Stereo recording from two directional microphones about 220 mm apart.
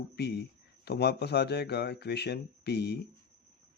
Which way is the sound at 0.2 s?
50° left (ahead or behind).